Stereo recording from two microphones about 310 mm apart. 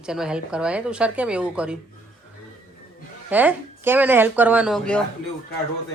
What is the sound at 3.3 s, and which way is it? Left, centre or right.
Speech, centre.